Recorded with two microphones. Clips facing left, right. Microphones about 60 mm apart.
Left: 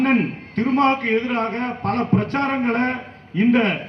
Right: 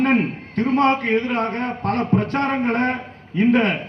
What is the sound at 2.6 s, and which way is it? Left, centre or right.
A man's voice, centre.